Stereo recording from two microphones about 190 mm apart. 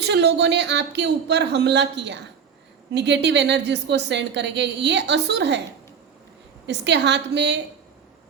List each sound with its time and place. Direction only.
0.0 s a woman's voice: 65° right (ahead or behind)
6.7 s a woman's voice: 65° right (ahead or behind)